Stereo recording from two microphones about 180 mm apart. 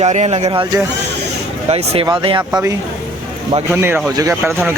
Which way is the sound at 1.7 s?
35° right (ahead or behind).